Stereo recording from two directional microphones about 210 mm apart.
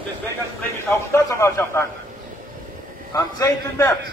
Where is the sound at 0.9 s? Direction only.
15° left (ahead or behind).